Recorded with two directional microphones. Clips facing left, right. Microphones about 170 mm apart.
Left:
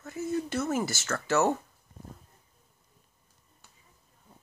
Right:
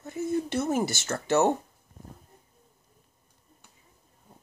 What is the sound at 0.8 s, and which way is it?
Speech, 20° right (ahead or behind).